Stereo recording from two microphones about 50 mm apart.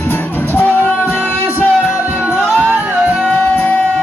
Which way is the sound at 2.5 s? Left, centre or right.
Right.